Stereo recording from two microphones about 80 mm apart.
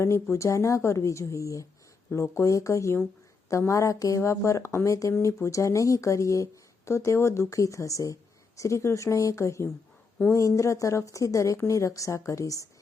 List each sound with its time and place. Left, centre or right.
0.0 s speech: left